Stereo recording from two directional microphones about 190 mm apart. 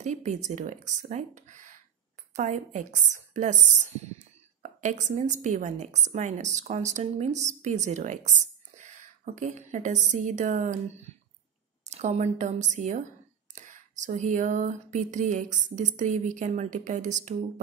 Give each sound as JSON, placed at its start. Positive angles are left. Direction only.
{"t": 0.0, "sound": "a woman's voice", "side_deg": -40}